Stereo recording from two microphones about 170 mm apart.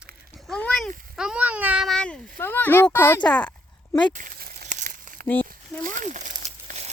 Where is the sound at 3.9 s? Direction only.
25° left (ahead or behind).